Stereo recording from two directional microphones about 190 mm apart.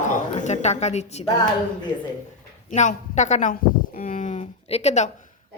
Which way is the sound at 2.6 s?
40° left (ahead or behind).